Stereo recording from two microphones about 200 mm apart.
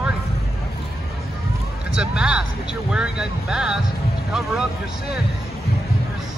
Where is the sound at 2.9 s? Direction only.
5° right (ahead or behind).